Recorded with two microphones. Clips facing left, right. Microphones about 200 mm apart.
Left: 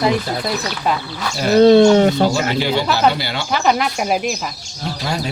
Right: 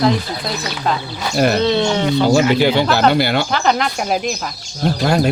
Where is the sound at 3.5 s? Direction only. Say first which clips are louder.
Even; 5° left (ahead or behind).